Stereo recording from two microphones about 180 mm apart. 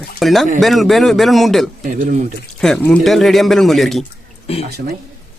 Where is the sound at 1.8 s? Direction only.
45° right (ahead or behind).